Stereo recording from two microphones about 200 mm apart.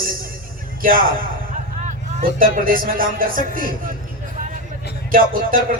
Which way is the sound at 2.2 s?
45° right (ahead or behind).